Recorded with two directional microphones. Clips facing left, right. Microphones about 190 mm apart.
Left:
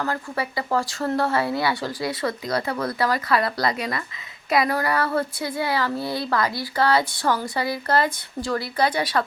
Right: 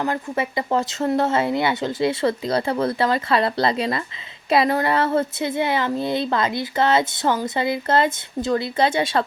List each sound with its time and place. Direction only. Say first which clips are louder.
0.0 s speech: right 3 dB; 20° right (ahead or behind)